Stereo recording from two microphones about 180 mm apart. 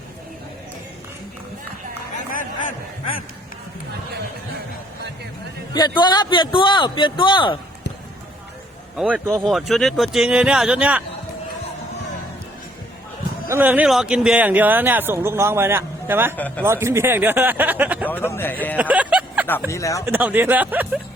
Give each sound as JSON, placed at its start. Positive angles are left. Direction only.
{"t": 2.3, "sound": "a sound", "side_deg": 45}
{"t": 6.0, "sound": "a man's voice", "side_deg": 25}
{"t": 9.0, "sound": "speech", "side_deg": -5}
{"t": 13.5, "sound": "speech", "side_deg": -10}
{"t": 16.3, "sound": "speech", "side_deg": 10}
{"t": 16.6, "sound": "speech", "side_deg": -15}
{"t": 18.1, "sound": "speech", "side_deg": 10}
{"t": 18.8, "sound": "vehicle", "side_deg": -10}
{"t": 19.7, "sound": "speech", "side_deg": 15}
{"t": 20.1, "sound": "speech", "side_deg": -10}